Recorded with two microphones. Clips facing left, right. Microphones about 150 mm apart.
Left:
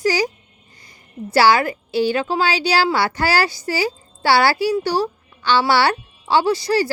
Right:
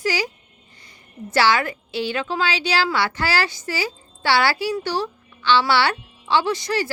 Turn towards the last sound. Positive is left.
turn(degrees=35)  # may be behind; listen again after turning